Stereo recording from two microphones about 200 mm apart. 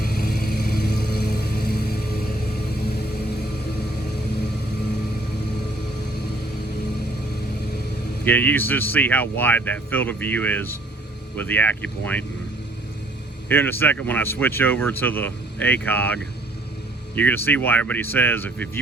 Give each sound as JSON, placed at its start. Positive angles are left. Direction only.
{"t": 0.0, "sound": "vehicle", "side_deg": 50}
{"t": 8.2, "sound": "speech", "side_deg": 10}
{"t": 13.5, "sound": "speech", "side_deg": 10}